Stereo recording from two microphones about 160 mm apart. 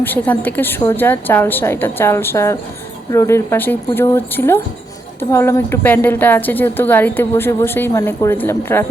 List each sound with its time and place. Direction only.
0.0 s a woman's voice: 10° left (ahead or behind)